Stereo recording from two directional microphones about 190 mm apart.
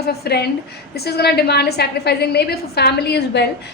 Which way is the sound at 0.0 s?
55° left (ahead or behind).